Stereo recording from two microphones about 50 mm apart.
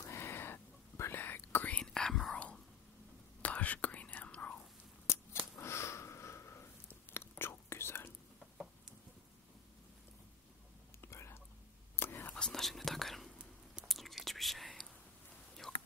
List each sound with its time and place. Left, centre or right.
0.0 s a sound: left
1.1 s whispering: left
1.7 s whispering: left
3.4 s whispering: left
5.0 s a sound: left
6.9 s whispering: left
11.0 s whispering: left
11.9 s whispering: left
12.4 s whispering: centre
12.6 s whispering: centre